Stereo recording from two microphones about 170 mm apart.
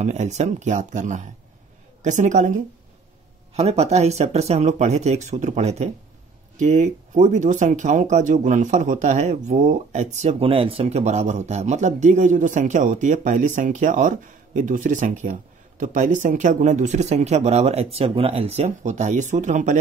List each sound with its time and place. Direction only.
0.0 s speech: 40° right (ahead or behind)